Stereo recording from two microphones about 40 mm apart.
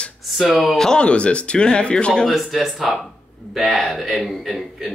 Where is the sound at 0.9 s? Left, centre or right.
Left.